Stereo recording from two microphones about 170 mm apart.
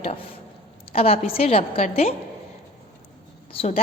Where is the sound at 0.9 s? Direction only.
35° left (ahead or behind).